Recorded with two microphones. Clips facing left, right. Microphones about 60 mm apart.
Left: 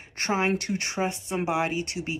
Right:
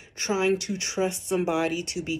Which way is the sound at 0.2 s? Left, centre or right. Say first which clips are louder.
Right 1 dB; left.